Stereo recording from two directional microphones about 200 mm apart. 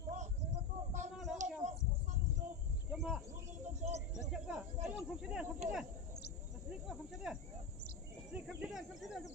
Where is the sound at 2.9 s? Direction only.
Centre (ahead or behind).